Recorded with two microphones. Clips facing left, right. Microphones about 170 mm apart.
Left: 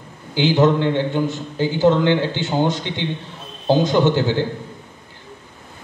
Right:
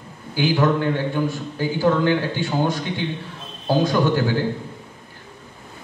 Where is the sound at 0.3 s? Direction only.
25° left (ahead or behind).